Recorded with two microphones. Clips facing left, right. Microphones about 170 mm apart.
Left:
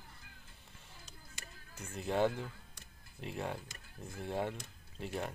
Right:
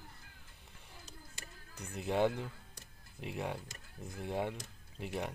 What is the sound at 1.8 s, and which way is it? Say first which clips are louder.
Speech: even; 15° right (ahead or behind).